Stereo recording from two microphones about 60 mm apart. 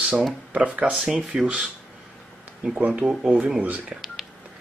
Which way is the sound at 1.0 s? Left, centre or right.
Centre.